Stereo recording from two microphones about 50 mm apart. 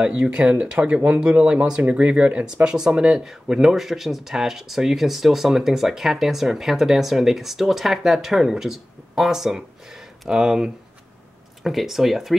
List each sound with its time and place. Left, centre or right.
0.0 s speech: right; by 12.4 s centre